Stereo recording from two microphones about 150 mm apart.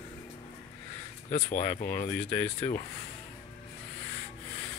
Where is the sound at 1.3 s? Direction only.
60° left (ahead or behind).